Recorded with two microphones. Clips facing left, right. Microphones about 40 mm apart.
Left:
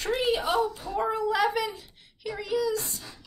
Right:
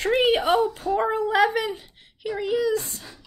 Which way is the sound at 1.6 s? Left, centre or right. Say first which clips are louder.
Right 5 dB; right.